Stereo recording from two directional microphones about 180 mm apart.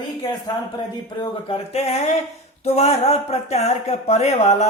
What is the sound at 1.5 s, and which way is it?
Speech, 35° left (ahead or behind).